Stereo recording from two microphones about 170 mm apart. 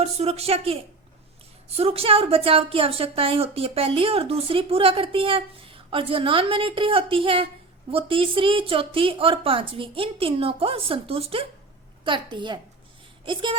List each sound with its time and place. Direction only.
0.0 s a woman's voice: 35° right (ahead or behind)